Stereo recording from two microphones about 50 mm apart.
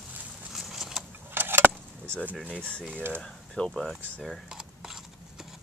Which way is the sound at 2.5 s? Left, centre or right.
Left.